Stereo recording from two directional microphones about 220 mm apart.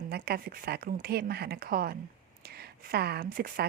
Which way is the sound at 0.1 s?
40° right (ahead or behind).